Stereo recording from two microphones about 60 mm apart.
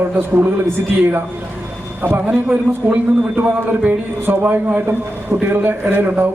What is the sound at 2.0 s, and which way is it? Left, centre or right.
A man's voice, right.